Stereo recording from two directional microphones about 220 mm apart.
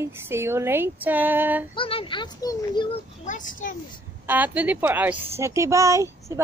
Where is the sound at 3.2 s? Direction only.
35° left (ahead or behind).